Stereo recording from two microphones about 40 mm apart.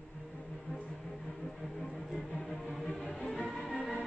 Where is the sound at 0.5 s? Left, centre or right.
Centre.